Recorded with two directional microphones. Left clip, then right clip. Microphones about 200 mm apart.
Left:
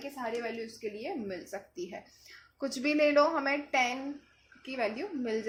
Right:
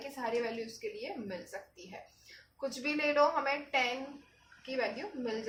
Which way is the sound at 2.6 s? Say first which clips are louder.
Left 6 dB; 35° left (ahead or behind).